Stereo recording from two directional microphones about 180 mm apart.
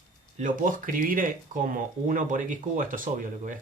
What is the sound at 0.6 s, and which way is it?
Speech, 50° right (ahead or behind).